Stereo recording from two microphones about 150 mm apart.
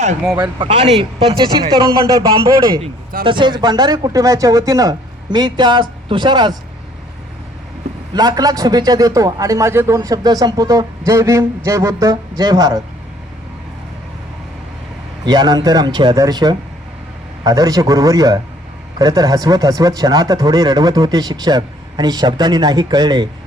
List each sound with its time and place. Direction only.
0.3 s a man's voice: 30° right (ahead or behind)
8.1 s a man's voice: 25° right (ahead or behind)
15.2 s a man's voice: 30° right (ahead or behind)